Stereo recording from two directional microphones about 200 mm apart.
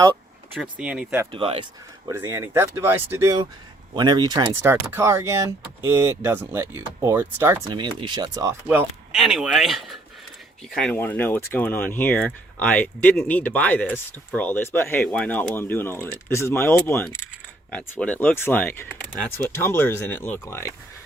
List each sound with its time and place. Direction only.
0.5 s speech: 5° right (ahead or behind)
1.3 s speech: 25° right (ahead or behind)
2.0 s speech: 10° right (ahead or behind)
7.7 s speech: 25° right (ahead or behind); by 20.7 s 15° left (ahead or behind)